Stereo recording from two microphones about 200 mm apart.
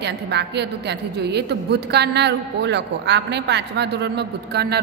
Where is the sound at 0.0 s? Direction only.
55° right (ahead or behind).